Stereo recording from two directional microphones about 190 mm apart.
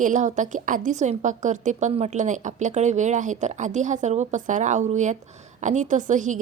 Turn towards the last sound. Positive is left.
turn(degrees=-40)  # may be behind; listen again after turning